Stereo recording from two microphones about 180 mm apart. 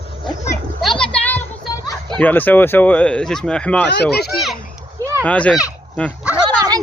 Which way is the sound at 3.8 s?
70° left (ahead or behind).